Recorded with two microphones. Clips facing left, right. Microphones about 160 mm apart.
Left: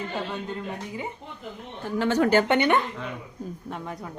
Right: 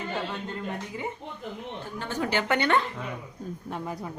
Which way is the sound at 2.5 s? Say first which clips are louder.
Left 3 dB; 20° left (ahead or behind).